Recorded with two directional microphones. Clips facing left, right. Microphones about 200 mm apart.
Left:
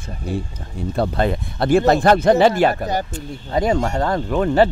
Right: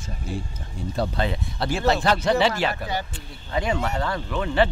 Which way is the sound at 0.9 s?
50° left (ahead or behind).